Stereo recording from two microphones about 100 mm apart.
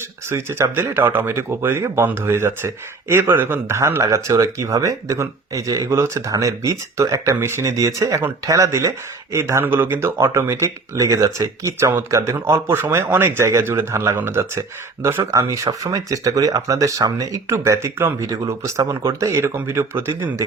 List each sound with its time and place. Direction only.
0.3 s speech: 25° right (ahead or behind)